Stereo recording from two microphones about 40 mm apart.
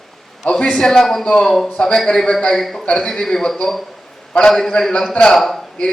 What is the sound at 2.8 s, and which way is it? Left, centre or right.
Speech, left.